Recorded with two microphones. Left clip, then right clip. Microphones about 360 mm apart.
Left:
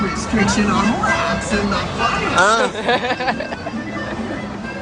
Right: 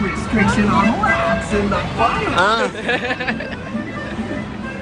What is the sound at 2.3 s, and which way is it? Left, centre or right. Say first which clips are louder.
Speech: left 5 dB; centre.